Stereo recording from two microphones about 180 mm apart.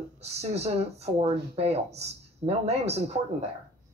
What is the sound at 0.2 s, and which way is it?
Speech, 35° right (ahead or behind).